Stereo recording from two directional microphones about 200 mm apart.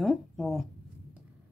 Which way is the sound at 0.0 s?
Centre (ahead or behind).